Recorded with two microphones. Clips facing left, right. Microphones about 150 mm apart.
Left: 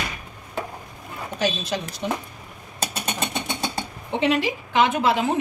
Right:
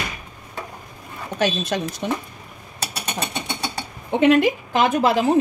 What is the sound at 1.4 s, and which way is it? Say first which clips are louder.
Speech: right 3 dB; 60° right (ahead or behind).